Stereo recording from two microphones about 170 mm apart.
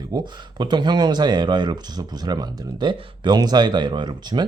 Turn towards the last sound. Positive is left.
turn(degrees=-25)  # may be behind; listen again after turning